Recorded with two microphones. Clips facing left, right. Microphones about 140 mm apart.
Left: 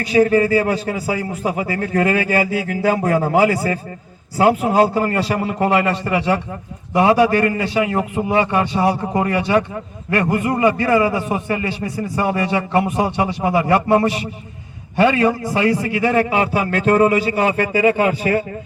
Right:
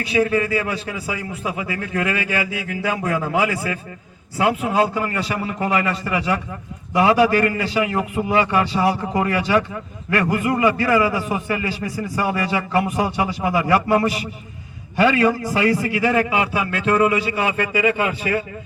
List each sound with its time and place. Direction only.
0.0 s a man's voice: 40° left (ahead or behind)